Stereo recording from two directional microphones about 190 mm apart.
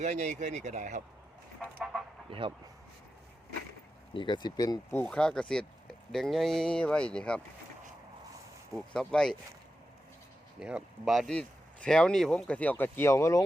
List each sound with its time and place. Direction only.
0.0 s speech: 40° right (ahead or behind)
2.3 s speech: 30° right (ahead or behind)
4.1 s speech: 25° left (ahead or behind)
5.0 s speech: 5° left (ahead or behind)
8.7 s speech: 5° left (ahead or behind)
10.6 s speech: 5° right (ahead or behind); by 13.4 s 15° left (ahead or behind)